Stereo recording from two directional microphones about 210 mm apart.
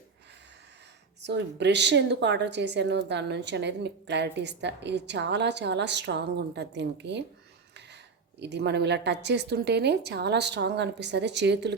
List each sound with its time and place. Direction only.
1.2 s a woman's voice: 55° right (ahead or behind)
8.4 s a woman's voice: 55° right (ahead or behind)